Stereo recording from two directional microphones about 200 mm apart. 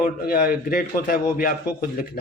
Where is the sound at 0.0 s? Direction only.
45° left (ahead or behind).